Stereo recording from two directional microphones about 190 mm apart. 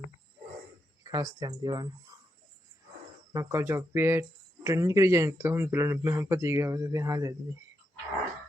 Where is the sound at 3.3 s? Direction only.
15° right (ahead or behind).